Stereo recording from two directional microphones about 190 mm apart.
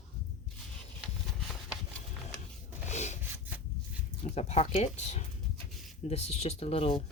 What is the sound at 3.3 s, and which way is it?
Wood, 10° right (ahead or behind).